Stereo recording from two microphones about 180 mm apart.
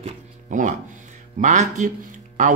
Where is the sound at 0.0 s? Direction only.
45° right (ahead or behind).